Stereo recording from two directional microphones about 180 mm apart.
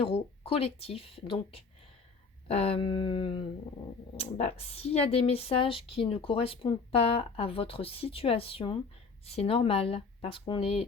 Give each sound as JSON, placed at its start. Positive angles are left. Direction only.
{"t": 0.0, "sound": "speech", "side_deg": 30}
{"t": 2.5, "sound": "a sound", "side_deg": 35}
{"t": 4.2, "sound": "speech", "side_deg": 35}